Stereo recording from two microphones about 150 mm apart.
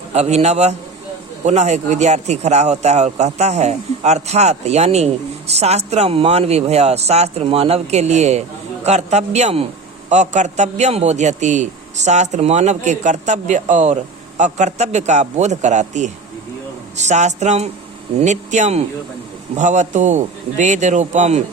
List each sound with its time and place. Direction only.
0.1 s speech: 45° right (ahead or behind)